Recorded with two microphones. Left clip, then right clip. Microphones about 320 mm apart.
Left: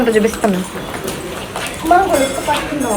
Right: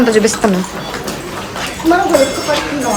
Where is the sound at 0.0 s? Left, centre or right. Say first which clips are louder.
Right 2 dB; centre.